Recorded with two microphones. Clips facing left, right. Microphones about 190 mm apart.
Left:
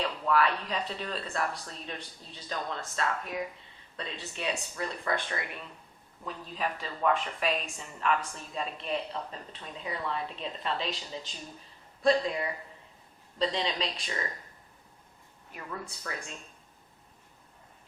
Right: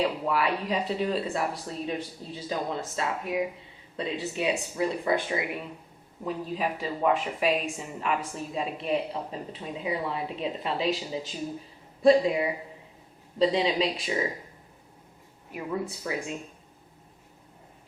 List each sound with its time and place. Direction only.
0.0 s speech: 10° right (ahead or behind)
15.5 s speech: 15° right (ahead or behind)